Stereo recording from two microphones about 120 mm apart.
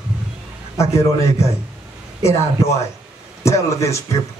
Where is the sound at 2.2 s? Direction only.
25° left (ahead or behind).